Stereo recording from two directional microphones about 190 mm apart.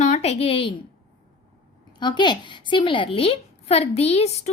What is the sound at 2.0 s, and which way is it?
A woman's voice, 25° left (ahead or behind).